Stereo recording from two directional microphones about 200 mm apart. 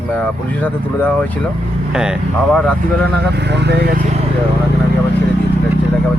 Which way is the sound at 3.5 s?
55° right (ahead or behind).